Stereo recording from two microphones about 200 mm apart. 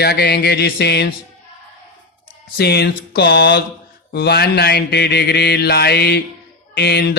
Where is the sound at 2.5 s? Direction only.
55° left (ahead or behind).